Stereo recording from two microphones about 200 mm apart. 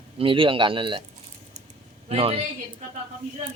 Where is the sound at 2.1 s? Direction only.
30° right (ahead or behind).